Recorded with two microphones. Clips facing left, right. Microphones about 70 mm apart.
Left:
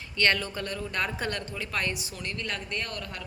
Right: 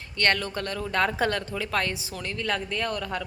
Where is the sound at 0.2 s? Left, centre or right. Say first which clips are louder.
Right 1 dB; right.